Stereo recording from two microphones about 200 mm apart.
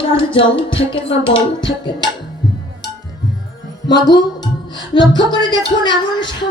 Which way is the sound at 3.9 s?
20° left (ahead or behind).